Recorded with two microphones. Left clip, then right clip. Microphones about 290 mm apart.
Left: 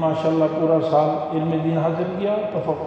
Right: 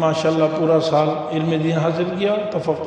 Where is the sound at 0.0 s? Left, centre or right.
Right.